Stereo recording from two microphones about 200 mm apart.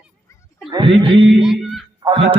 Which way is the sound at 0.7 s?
25° right (ahead or behind).